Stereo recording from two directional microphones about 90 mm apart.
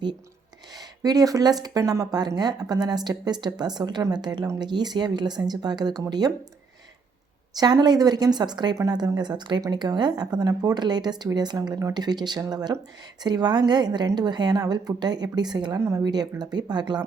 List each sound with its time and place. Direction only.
0.8 s speech: 45° right (ahead or behind)
7.5 s speech: 50° right (ahead or behind)
8.8 s speech: 40° right (ahead or behind)
15.8 s speech: 40° right (ahead or behind)
16.0 s speech: 50° right (ahead or behind)